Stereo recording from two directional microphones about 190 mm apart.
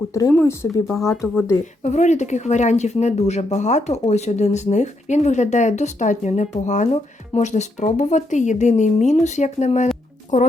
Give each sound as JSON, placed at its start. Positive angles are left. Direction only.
{"t": 0.1, "sound": "speech", "side_deg": 15}
{"t": 1.8, "sound": "speech", "side_deg": 40}